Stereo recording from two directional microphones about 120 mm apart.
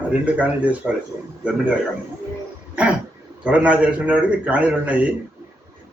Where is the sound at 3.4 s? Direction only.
10° right (ahead or behind).